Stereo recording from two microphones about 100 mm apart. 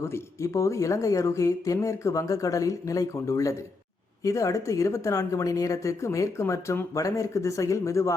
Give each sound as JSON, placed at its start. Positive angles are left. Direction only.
{"t": 0.0, "sound": "speech", "side_deg": 30}